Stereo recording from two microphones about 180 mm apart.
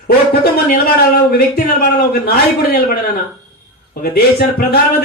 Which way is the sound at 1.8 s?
60° left (ahead or behind).